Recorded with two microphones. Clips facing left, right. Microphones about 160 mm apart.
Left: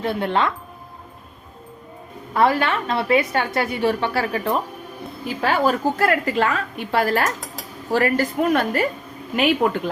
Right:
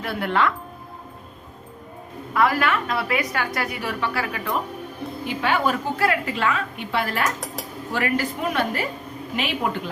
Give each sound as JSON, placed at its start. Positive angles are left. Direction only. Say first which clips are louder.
{"t": 0.0, "sound": "a woman's voice", "louder": "left 2 dB", "side_deg": 25}
{"t": 2.3, "sound": "a woman's voice", "louder": "left 2 dB", "side_deg": 30}